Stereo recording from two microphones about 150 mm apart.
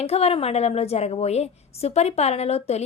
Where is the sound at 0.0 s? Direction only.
45° left (ahead or behind).